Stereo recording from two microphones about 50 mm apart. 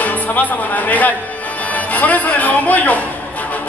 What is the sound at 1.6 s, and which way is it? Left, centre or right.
Speech, left.